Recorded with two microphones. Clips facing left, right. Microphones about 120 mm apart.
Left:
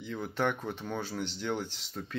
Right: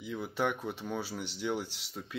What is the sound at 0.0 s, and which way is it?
Speech, 5° right (ahead or behind).